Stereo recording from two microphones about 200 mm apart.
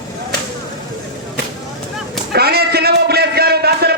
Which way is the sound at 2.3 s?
50° right (ahead or behind).